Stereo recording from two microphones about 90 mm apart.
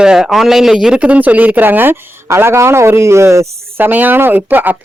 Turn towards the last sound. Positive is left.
turn(degrees=-20)  # may be behind; listen again after turning